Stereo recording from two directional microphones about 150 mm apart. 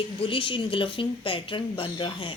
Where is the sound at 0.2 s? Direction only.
35° left (ahead or behind).